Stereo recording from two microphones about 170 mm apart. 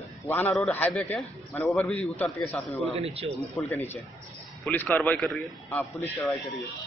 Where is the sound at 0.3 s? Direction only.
5° left (ahead or behind).